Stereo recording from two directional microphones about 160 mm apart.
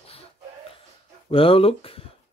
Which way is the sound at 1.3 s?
35° left (ahead or behind).